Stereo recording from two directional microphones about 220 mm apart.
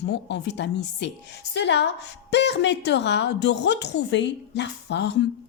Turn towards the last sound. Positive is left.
turn(degrees=50)  # may be behind; listen again after turning